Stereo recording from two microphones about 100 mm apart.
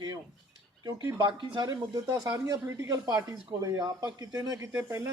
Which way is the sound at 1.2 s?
55° right (ahead or behind).